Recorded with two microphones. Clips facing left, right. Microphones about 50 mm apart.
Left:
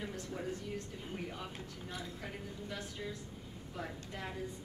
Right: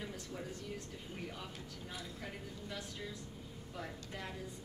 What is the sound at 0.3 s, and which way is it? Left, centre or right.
A woman's voice, centre.